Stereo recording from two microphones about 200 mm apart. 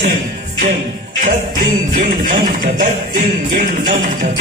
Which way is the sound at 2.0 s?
40° right (ahead or behind).